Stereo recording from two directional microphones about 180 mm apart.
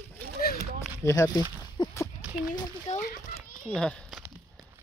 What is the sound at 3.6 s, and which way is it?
Speech, 5° left (ahead or behind).